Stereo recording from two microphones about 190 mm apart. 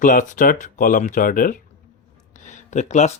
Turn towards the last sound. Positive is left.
turn(degrees=35)  # may be behind; listen again after turning